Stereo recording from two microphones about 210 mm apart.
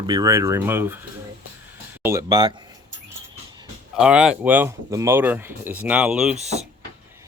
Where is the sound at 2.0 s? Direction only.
15° right (ahead or behind).